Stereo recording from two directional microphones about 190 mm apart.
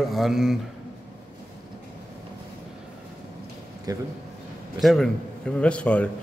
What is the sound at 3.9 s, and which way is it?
Speech, 20° right (ahead or behind).